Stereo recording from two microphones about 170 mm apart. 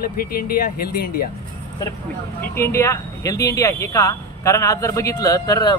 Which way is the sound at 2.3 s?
15° left (ahead or behind).